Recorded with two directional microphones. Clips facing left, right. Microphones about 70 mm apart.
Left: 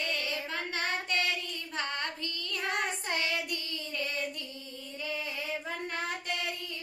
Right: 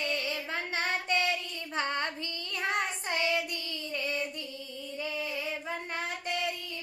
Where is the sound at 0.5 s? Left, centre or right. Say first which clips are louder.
Right 2 dB; right.